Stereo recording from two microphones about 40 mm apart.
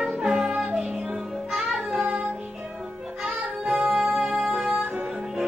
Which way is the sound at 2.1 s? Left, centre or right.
Right.